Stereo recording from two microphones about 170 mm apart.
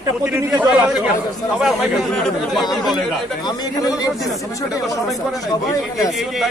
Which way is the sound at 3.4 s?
20° left (ahead or behind).